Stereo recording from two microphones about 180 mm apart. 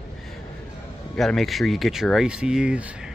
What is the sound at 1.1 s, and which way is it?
Speech, centre (ahead or behind).